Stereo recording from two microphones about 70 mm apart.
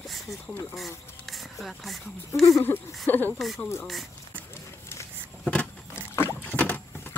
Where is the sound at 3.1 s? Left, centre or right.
Left.